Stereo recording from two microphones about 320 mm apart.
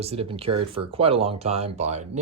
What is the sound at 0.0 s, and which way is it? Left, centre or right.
Speech, centre.